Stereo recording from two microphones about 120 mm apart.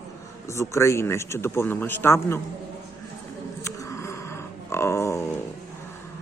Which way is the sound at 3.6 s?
25° left (ahead or behind).